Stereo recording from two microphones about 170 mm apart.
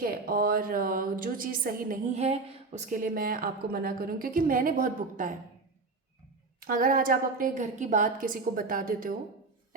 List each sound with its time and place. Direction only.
0.0 s a woman's voice: 60° right (ahead or behind)
6.6 s a woman's voice: 55° right (ahead or behind)